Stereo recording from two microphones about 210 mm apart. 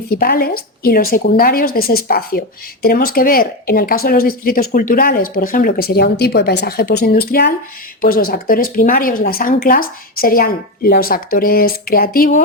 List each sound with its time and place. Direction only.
0.2 s speech: 45° left (ahead or behind)